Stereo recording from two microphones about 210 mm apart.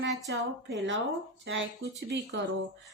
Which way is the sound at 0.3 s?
60° right (ahead or behind).